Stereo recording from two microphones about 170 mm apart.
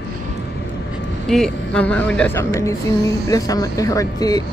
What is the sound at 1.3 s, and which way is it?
A woman's voice, 5° left (ahead or behind).